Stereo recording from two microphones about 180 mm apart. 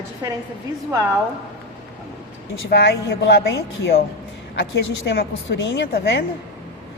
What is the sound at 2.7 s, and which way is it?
A woman's voice, 65° left (ahead or behind).